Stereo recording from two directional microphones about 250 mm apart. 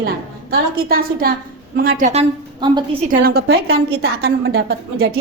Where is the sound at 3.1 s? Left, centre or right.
Right.